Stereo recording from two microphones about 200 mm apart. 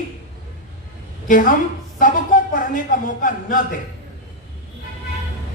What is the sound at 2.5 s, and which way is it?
A man's voice, 40° left (ahead or behind).